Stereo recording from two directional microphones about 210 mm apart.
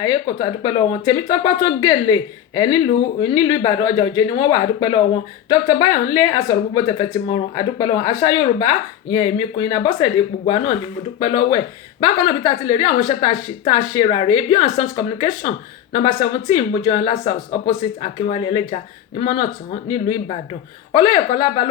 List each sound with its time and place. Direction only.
0.0 s speech: 20° left (ahead or behind)
16.6 s speech: 20° left (ahead or behind)
20.1 s speech: 20° left (ahead or behind)